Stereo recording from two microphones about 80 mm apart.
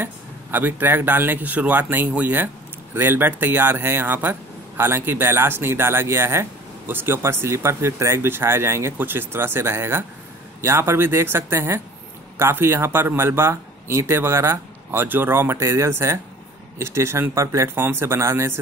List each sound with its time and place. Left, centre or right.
0.0 s speech: right